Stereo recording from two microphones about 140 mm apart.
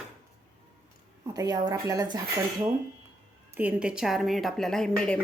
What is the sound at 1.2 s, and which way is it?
Speech, 25° right (ahead or behind).